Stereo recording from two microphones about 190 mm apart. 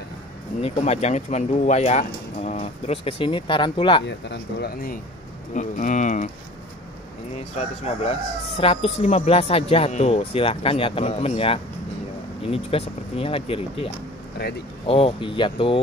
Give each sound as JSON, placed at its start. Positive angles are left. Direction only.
{"t": 0.6, "sound": "speech", "side_deg": 35}
{"t": 4.0, "sound": "speech", "side_deg": 65}
{"t": 5.5, "sound": "speech", "side_deg": 40}
{"t": 7.3, "sound": "speech", "side_deg": 35}
{"t": 14.9, "sound": "speech", "side_deg": 30}